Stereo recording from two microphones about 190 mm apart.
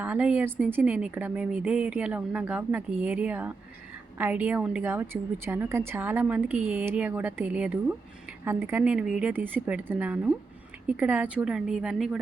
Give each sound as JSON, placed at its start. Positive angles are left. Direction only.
{"t": 0.0, "sound": "a woman's voice", "side_deg": -10}